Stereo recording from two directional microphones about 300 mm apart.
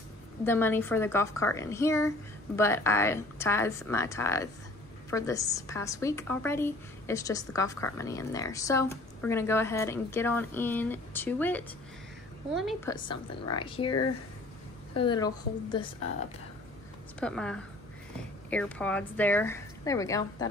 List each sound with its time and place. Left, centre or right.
0.5 s a woman's voice: centre
12.9 s a woman's voice: centre
17.2 s a woman's voice: centre